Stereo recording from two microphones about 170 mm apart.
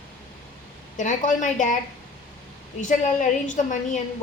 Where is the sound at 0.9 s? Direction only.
50° left (ahead or behind).